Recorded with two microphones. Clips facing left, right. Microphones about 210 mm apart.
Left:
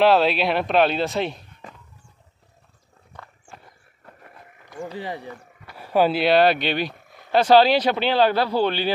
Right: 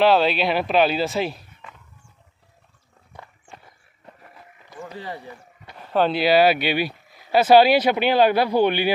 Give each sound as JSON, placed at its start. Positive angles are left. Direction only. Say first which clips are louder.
{"t": 0.0, "sound": "speech", "louder": "even", "side_deg": 0}
{"t": 3.1, "sound": "walk", "louder": "right 1 dB", "side_deg": -15}
{"t": 4.9, "sound": "speech", "louder": "even", "side_deg": 15}